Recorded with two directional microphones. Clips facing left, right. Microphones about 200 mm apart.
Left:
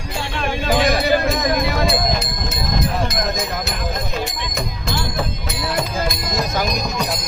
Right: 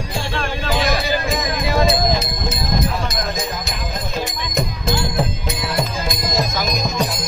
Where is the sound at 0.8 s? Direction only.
60° left (ahead or behind).